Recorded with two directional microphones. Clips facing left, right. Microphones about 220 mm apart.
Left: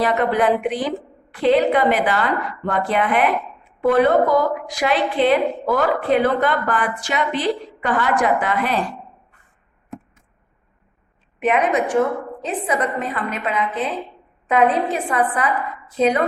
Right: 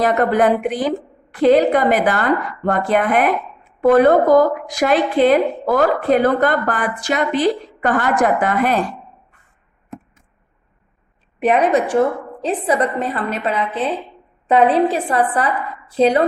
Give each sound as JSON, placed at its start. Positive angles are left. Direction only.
{"t": 0.0, "sound": "a woman's voice", "side_deg": -45}
{"t": 11.3, "sound": "a woman's voice", "side_deg": -35}